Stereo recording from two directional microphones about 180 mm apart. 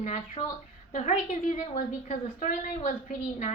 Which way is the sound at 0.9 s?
45° left (ahead or behind).